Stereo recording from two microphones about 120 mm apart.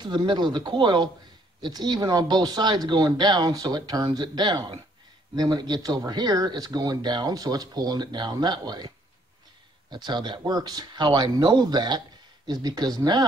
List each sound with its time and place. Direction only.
0.0 s speech: 40° right (ahead or behind)